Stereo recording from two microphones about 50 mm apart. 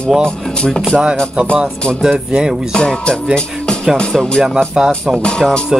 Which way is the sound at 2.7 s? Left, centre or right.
Centre.